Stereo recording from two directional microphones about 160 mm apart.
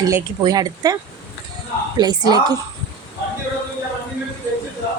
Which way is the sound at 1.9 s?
25° right (ahead or behind).